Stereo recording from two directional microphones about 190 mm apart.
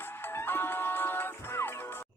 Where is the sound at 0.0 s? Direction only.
10° left (ahead or behind).